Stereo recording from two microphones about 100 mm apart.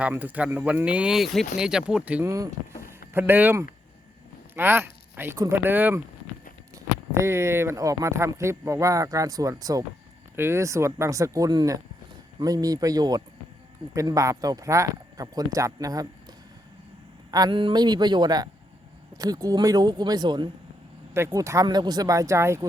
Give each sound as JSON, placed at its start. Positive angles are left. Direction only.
{"t": 0.0, "sound": "speech", "side_deg": -15}
{"t": 2.2, "sound": "speech", "side_deg": -35}
{"t": 3.1, "sound": "speech", "side_deg": -20}
{"t": 10.3, "sound": "speech", "side_deg": -25}
{"t": 17.3, "sound": "speech", "side_deg": -50}
{"t": 21.1, "sound": "speech", "side_deg": -30}
{"t": 21.7, "sound": "speech", "side_deg": -45}